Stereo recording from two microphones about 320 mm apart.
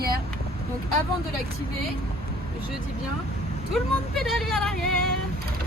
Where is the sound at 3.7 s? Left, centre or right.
Centre.